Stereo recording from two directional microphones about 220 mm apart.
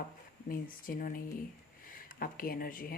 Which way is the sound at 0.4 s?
40° left (ahead or behind).